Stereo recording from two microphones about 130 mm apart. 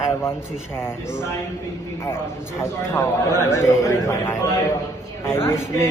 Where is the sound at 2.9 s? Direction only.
20° left (ahead or behind).